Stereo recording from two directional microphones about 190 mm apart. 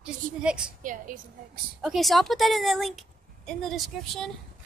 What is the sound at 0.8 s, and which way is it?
Speech, 45° right (ahead or behind).